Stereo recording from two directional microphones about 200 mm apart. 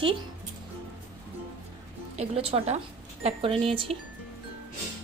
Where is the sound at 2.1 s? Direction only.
30° right (ahead or behind).